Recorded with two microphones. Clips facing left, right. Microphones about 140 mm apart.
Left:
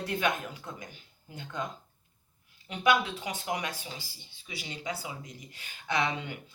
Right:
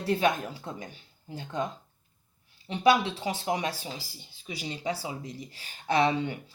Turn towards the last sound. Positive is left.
turn(degrees=-35)  # may be behind; listen again after turning